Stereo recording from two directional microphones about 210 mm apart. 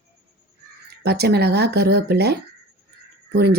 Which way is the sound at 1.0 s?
50° right (ahead or behind).